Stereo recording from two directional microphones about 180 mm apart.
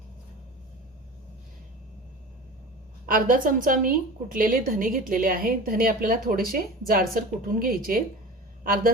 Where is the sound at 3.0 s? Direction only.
50° right (ahead or behind).